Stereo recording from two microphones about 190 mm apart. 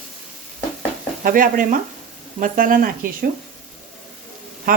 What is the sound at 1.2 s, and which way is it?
Speech, 45° right (ahead or behind).